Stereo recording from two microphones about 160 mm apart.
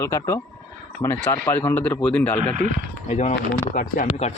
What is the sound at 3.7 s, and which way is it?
Speech, 60° left (ahead or behind).